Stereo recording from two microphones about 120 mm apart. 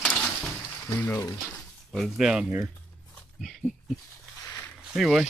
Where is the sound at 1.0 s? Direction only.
15° left (ahead or behind).